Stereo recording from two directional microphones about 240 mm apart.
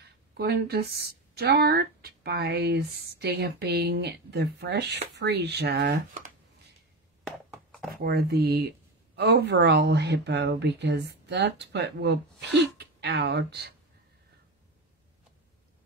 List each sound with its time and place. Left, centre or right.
0.0 s speech: right
7.9 s speech: right